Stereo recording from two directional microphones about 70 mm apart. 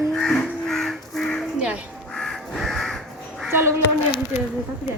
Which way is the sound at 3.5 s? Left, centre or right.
Right.